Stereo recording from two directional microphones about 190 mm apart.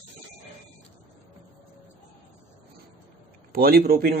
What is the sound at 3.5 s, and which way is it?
Speech, 50° right (ahead or behind).